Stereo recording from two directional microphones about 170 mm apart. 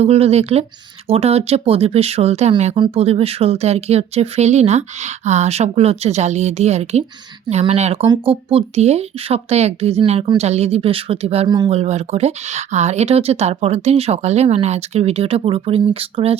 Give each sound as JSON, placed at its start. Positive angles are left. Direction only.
{"t": 0.0, "sound": "speech", "side_deg": -35}